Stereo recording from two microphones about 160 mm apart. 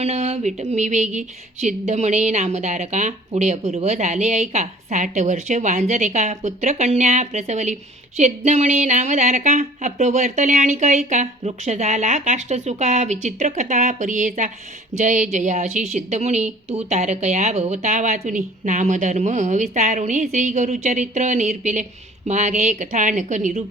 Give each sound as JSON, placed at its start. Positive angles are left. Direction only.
{"t": 0.0, "sound": "a woman's voice", "side_deg": -40}